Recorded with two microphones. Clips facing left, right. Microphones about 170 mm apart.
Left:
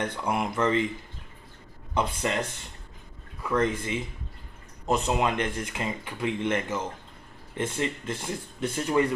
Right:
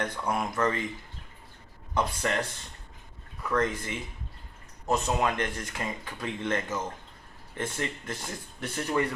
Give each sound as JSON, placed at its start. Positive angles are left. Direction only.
{"t": 0.0, "sound": "speech", "side_deg": 25}
{"t": 2.0, "sound": "speech", "side_deg": 20}